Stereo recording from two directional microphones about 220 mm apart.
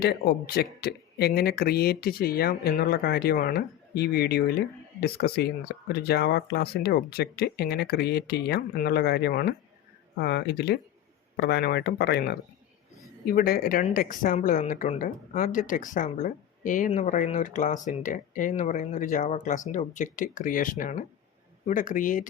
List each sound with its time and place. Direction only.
0.0 s a woman's voice: 45° left (ahead or behind)